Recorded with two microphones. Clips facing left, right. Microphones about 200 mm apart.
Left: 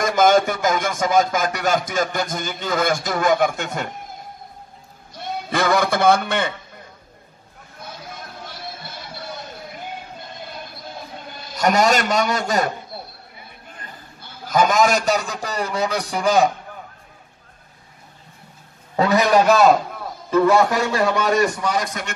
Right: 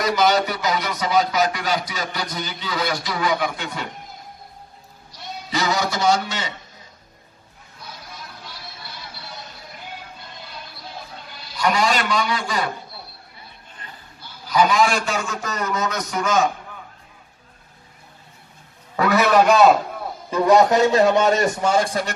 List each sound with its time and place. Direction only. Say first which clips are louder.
0.0 s speech: left 3 dB; 50° left (ahead or behind)
5.1 s a man's voice: left 4 dB; 55° left (ahead or behind)
7.8 s music: left 4 dB; 50° left (ahead or behind)
10.4 s a sound: left 3 dB; 50° left (ahead or behind)
14.2 s a man's voice: left 1 dB; 50° left (ahead or behind); by 16.4 s 35° left (ahead or behind)
18.9 s a sound: left 1 dB; 20° left (ahead or behind)
19.3 s a man's voice: right 1 dB; centre (ahead or behind)
20.2 s a man's voice: even; 15° right (ahead or behind)